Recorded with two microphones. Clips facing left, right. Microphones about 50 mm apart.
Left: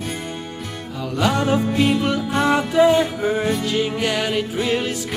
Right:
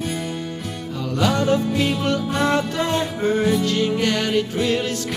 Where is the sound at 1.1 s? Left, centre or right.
Centre.